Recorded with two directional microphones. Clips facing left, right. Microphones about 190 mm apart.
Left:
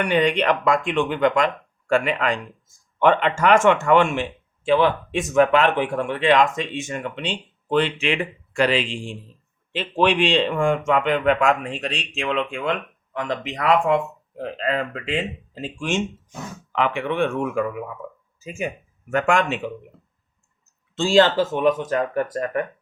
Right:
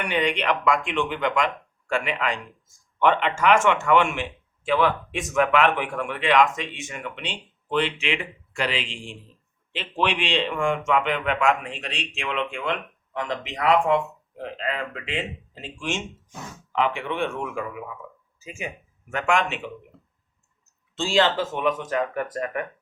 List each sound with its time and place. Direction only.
0.1 s speech: 40° left (ahead or behind)
16.7 s speech: 60° left (ahead or behind); by 19.7 s 45° left (ahead or behind)
20.9 s speech: 45° left (ahead or behind)